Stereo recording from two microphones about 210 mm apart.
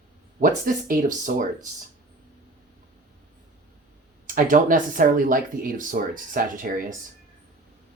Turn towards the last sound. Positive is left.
turn(degrees=-40)  # may be behind; listen again after turning